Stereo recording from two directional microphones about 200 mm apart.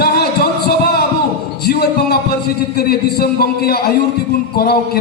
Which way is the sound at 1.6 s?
50° left (ahead or behind).